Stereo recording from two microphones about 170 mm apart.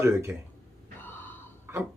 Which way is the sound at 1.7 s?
15° right (ahead or behind).